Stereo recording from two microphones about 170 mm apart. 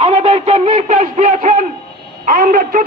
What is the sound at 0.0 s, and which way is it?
A man's voice, 35° right (ahead or behind).